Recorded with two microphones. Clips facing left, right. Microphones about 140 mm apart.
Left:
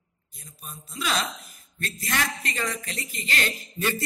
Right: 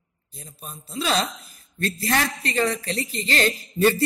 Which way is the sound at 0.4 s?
30° right (ahead or behind).